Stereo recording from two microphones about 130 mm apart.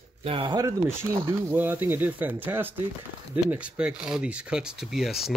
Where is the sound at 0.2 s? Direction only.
45° right (ahead or behind).